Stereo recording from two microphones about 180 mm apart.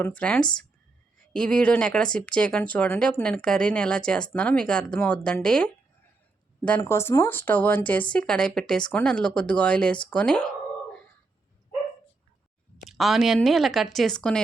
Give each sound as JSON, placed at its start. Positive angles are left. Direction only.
{"t": 0.0, "sound": "speech", "side_deg": 5}
{"t": 12.9, "sound": "speech", "side_deg": 0}